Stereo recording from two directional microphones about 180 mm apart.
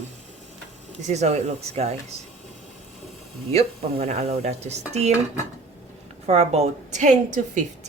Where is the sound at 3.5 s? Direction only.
35° right (ahead or behind).